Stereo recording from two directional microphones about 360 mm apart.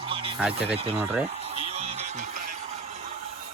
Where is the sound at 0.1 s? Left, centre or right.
Centre.